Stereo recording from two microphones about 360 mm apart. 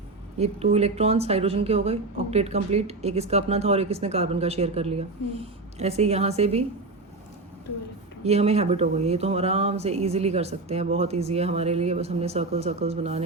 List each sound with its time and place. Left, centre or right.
0.3 s speech: centre
8.2 s speech: centre